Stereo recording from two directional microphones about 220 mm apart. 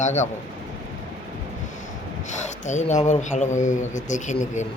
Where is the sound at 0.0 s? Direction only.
35° left (ahead or behind).